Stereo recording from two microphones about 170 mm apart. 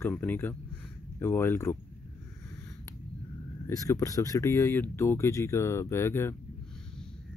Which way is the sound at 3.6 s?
20° left (ahead or behind).